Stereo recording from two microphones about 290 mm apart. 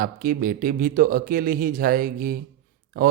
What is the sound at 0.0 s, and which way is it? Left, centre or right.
Speech, right.